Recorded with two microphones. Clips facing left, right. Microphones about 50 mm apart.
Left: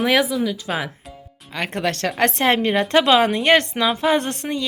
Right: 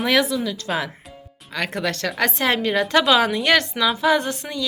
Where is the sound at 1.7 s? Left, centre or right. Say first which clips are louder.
Left 3 dB; left.